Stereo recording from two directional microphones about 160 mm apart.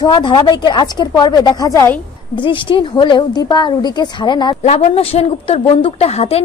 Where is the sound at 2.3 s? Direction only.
30° left (ahead or behind).